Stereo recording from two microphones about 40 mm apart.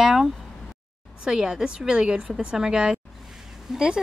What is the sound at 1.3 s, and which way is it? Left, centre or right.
Speech, centre.